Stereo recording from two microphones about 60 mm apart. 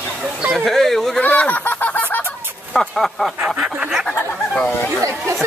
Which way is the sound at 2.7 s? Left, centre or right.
Centre.